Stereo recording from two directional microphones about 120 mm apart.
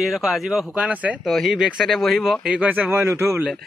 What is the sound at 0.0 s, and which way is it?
Speech, centre (ahead or behind).